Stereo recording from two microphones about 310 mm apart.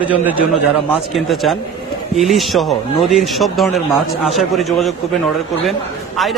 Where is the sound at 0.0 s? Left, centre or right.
Centre.